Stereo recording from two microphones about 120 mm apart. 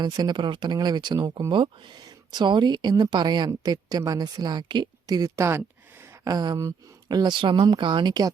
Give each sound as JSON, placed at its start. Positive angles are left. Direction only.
{"t": 0.0, "sound": "speech", "side_deg": -35}
{"t": 6.3, "sound": "speech", "side_deg": -35}